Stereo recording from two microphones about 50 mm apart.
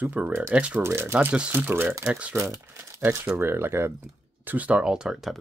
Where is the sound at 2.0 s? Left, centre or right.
Right.